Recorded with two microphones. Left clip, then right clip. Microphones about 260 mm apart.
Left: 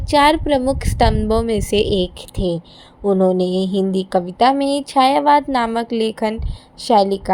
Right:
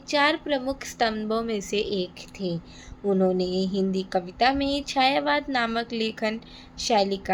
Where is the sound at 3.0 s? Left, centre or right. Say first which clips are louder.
Left 8 dB; centre.